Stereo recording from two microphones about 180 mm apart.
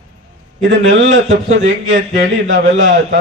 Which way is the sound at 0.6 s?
80° right.